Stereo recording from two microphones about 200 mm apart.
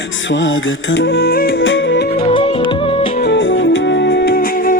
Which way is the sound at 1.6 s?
70° left (ahead or behind).